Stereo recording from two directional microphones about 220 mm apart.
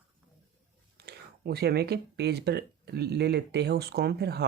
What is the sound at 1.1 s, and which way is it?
Speech, 45° right (ahead or behind).